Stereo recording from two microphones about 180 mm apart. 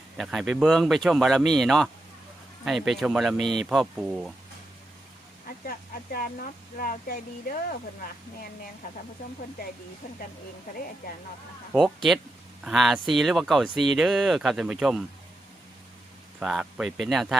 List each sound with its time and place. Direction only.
0.2 s speech: centre (ahead or behind)
5.6 s speech: 55° left (ahead or behind)
10.7 s speech: 50° left (ahead or behind)
11.7 s speech: centre (ahead or behind)
16.4 s speech: centre (ahead or behind)